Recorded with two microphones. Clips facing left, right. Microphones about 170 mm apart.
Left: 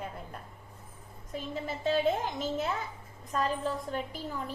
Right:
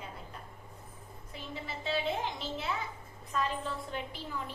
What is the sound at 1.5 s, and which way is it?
A woman's voice, 45° left (ahead or behind).